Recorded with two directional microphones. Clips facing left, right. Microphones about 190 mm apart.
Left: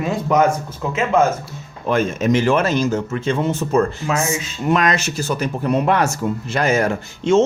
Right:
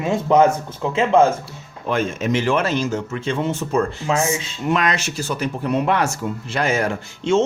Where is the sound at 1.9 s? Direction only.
45° left (ahead or behind).